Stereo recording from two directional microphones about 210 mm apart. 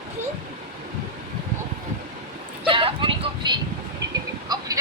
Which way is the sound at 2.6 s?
25° right (ahead or behind).